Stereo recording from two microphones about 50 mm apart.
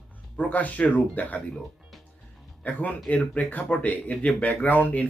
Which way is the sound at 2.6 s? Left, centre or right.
Left.